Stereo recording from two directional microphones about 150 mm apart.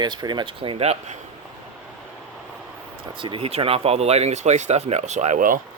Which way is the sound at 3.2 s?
35° right (ahead or behind).